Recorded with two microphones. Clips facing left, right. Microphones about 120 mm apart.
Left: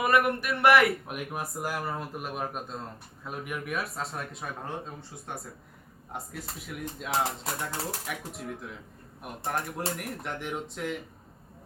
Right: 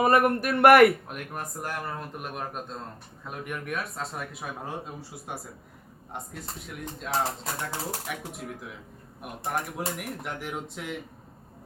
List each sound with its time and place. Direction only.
0.0 s speech: 40° right (ahead or behind)
1.0 s speech: 5° left (ahead or behind)